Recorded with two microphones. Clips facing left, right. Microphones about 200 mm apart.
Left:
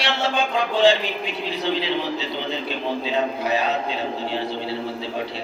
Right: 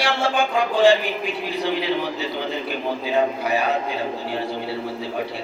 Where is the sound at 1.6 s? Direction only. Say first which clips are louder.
Right 1 dB; 25° left (ahead or behind).